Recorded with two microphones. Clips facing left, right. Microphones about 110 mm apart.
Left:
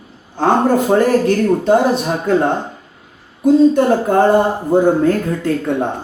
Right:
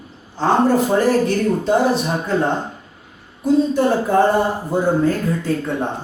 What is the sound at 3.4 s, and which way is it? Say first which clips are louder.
Speech: left 5 dB; 55° left (ahead or behind).